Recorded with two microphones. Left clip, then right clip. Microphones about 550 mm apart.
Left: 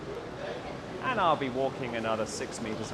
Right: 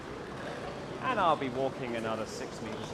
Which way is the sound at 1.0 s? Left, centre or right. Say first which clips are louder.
Left 1 dB; centre.